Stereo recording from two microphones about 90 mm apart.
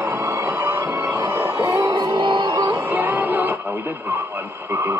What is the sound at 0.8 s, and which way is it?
Music, 20° right (ahead or behind).